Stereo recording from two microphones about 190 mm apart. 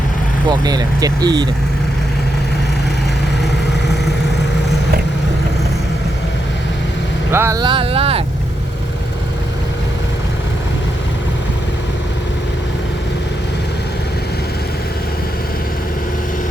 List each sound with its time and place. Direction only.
0.6 s speech: 20° right (ahead or behind)
7.3 s speech: 15° right (ahead or behind); by 8.2 s 30° right (ahead or behind)